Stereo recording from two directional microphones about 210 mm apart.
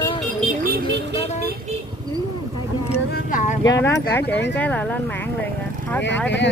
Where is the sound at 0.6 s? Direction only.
50° right (ahead or behind).